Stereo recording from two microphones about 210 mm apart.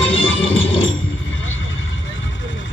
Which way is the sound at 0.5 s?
65° left (ahead or behind).